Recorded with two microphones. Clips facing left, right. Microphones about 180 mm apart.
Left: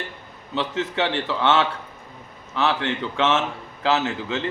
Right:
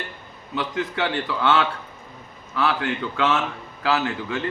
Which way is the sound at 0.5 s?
25° left (ahead or behind).